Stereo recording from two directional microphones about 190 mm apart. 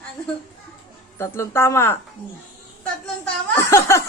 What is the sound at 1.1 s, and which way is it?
Speech, 15° left (ahead or behind).